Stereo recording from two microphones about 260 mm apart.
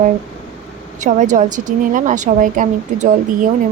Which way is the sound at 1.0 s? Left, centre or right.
Right.